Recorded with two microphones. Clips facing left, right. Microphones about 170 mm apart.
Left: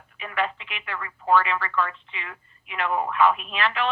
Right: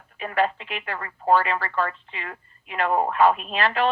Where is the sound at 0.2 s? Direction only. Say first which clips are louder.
Right 5 dB; 40° right (ahead or behind).